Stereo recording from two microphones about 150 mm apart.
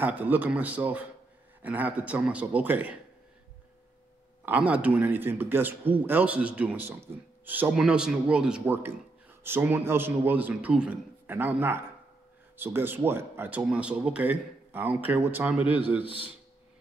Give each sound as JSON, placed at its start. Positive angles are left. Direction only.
{"t": 0.0, "sound": "a man's voice", "side_deg": -10}
{"t": 4.5, "sound": "a man's voice", "side_deg": -10}
{"t": 16.0, "sound": "a man's voice", "side_deg": 35}